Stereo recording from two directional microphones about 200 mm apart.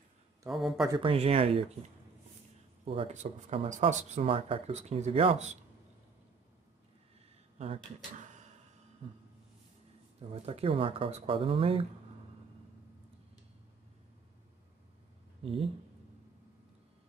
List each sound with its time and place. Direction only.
0.5 s speech: centre (ahead or behind)
0.8 s speech: 25° right (ahead or behind)
2.8 s speech: 30° right (ahead or behind)
7.5 s speech: 30° right (ahead or behind)
10.4 s speech: 30° right (ahead or behind)
15.4 s speech: 25° right (ahead or behind)